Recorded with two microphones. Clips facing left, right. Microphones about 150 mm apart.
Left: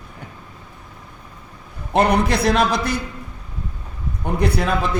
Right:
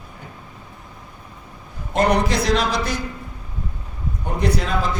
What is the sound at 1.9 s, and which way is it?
A man's voice, 60° left (ahead or behind).